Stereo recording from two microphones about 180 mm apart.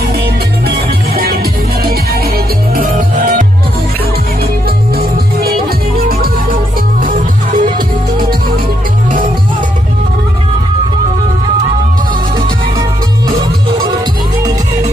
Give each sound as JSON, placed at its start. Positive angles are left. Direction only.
{"t": 0.7, "sound": "music", "side_deg": -55}
{"t": 4.6, "sound": "music", "side_deg": -55}